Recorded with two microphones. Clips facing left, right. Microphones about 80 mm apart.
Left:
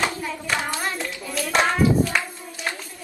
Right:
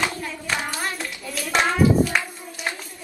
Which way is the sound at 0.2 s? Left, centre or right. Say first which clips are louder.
Left 1 dB; left.